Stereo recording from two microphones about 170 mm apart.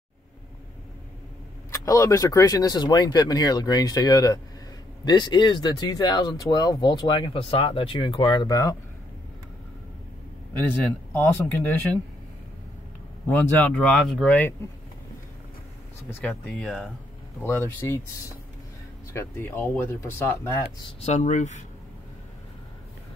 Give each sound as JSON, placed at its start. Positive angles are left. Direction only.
{"t": 1.7, "sound": "speech", "side_deg": 20}
{"t": 11.1, "sound": "speech", "side_deg": 15}
{"t": 13.3, "sound": "speech", "side_deg": 10}
{"t": 16.1, "sound": "speech", "side_deg": 10}
{"t": 19.1, "sound": "speech", "side_deg": 10}
{"t": 21.0, "sound": "speech", "side_deg": 45}